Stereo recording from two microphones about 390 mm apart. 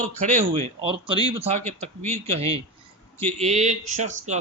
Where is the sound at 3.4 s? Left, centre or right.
Centre.